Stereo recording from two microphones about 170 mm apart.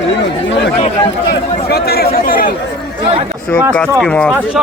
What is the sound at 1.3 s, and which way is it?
Speech, 70° left (ahead or behind).